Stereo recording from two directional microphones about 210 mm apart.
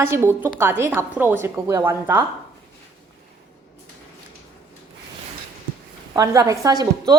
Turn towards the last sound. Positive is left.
turn(degrees=-20)  # may be behind; listen again after turning